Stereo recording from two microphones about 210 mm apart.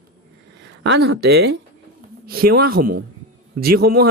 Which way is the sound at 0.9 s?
55° right (ahead or behind).